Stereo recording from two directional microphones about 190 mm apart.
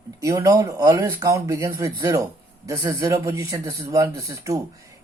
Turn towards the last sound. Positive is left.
turn(degrees=-15)  # may be behind; listen again after turning